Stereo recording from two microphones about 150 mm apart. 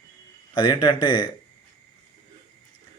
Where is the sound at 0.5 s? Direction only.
30° left (ahead or behind).